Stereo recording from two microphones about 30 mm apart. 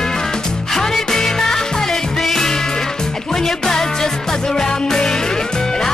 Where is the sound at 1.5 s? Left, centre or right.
Left.